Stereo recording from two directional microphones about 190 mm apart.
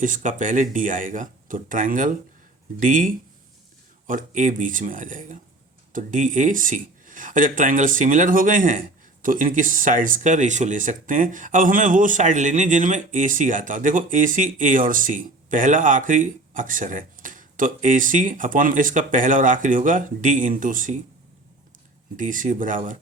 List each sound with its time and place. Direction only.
0.0 s speech: 45° right (ahead or behind)
22.1 s speech: 45° right (ahead or behind)